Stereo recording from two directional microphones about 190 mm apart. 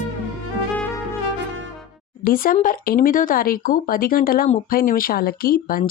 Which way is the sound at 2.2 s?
50° left (ahead or behind).